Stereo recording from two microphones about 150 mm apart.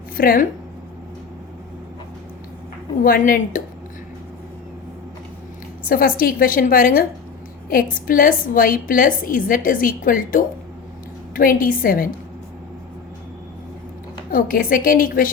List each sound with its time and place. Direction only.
0.2 s a woman's voice: 75° left (ahead or behind)
3.0 s a woman's voice: 70° left (ahead or behind)
5.9 s a woman's voice: 70° left (ahead or behind)
14.3 s a woman's voice: 75° left (ahead or behind)